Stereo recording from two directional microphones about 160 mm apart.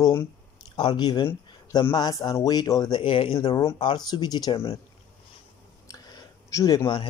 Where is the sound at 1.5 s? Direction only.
25° left (ahead or behind).